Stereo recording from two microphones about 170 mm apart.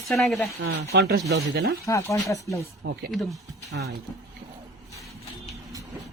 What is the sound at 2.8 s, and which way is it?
Speech, 90° right.